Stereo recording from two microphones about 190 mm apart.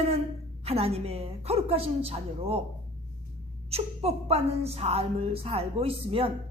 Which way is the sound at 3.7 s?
30° right (ahead or behind).